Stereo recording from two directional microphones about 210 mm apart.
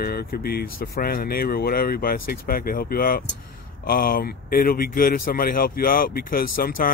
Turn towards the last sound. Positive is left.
turn(degrees=45)  # may be behind; listen again after turning